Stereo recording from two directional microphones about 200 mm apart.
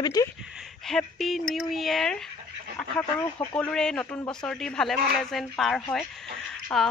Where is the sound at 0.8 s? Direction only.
Centre (ahead or behind).